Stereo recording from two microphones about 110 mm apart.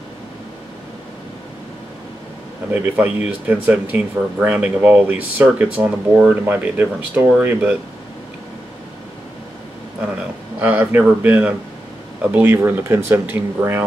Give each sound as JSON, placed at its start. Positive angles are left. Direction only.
{"t": 2.7, "sound": "speech", "side_deg": -15}
{"t": 10.6, "sound": "speech", "side_deg": -15}